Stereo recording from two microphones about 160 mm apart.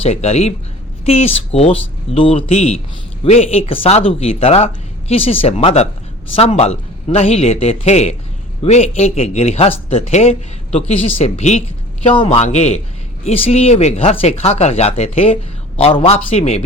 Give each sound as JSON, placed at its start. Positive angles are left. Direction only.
{"t": 0.0, "sound": "a man's voice", "side_deg": 40}